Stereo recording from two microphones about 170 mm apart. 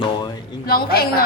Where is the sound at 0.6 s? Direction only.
60° left (ahead or behind).